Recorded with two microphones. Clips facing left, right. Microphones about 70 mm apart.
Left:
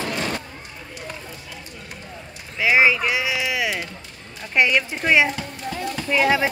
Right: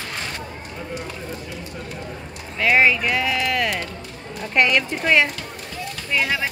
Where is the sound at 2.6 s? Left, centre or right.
Centre.